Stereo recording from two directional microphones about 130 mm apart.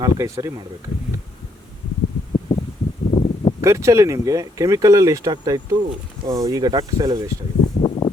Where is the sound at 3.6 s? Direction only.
20° right (ahead or behind).